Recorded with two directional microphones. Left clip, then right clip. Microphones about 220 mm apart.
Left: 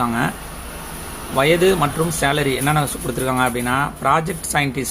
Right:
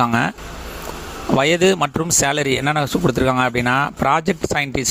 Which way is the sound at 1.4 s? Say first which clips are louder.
Left 1 dB; 45° right (ahead or behind).